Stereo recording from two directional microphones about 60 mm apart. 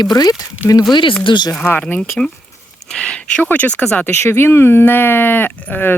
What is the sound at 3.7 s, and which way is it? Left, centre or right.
Speech, centre.